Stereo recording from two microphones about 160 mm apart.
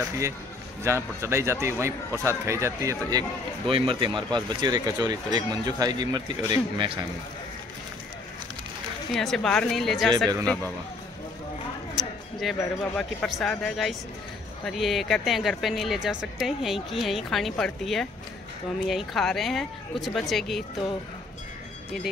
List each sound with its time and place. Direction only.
0.8 s a man's voice: 15° right (ahead or behind)
9.1 s speech: centre (ahead or behind)
11.9 s a sound: centre (ahead or behind)
12.9 s speech: centre (ahead or behind)